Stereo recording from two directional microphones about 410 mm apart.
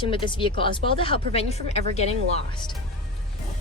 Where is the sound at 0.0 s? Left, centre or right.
Centre.